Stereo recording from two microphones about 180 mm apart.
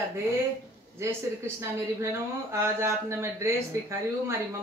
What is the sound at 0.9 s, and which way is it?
Speech, 15° right (ahead or behind).